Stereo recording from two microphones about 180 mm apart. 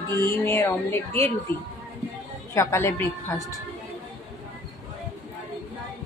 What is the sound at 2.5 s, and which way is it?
Speech, 15° left (ahead or behind).